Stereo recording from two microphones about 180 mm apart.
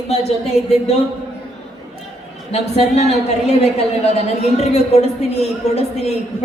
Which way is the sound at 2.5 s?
35° left (ahead or behind).